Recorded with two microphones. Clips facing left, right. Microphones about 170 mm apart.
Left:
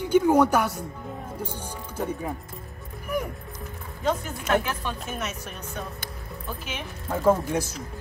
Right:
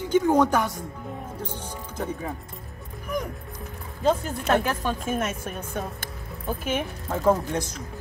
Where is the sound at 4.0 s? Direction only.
40° right (ahead or behind).